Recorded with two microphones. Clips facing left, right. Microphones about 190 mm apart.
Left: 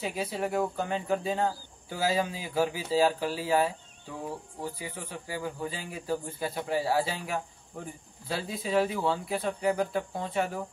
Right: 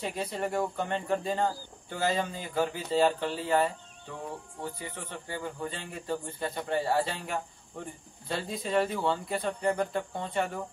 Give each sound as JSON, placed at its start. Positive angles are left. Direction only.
{"t": 0.0, "sound": "speech", "side_deg": 5}
{"t": 4.7, "sound": "speech", "side_deg": 10}